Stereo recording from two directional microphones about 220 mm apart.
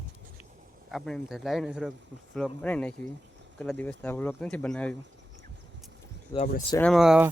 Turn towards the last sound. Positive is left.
turn(degrees=-5)  # may be behind; listen again after turning